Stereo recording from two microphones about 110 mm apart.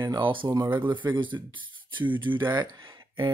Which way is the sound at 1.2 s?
45° right (ahead or behind).